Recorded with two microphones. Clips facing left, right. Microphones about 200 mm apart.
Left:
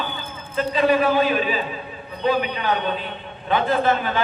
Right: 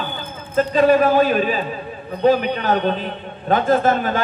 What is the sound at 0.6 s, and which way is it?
A man's voice, 45° right (ahead or behind).